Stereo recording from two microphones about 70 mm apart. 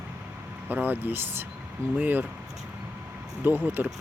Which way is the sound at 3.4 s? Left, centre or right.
Right.